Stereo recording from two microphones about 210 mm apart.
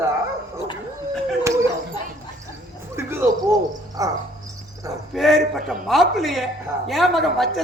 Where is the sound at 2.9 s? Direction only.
10° right (ahead or behind).